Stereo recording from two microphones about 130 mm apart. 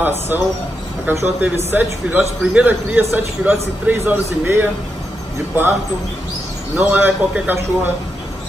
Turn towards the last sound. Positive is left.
turn(degrees=-15)  # may be behind; listen again after turning